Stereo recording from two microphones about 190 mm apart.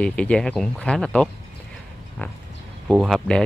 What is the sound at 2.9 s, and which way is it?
Speech, 5° right (ahead or behind).